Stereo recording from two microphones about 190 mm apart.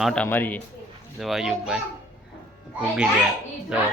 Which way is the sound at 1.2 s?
Centre (ahead or behind).